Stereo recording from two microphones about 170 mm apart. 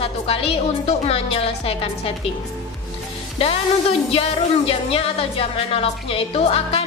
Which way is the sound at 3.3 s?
35° left (ahead or behind).